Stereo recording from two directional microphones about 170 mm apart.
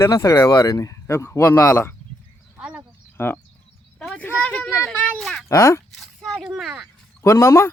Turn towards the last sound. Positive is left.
turn(degrees=15)  # may be behind; listen again after turning